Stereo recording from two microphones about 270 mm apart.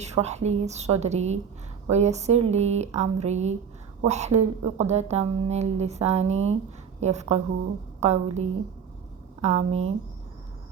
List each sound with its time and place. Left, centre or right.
0.0 s a woman's voice: right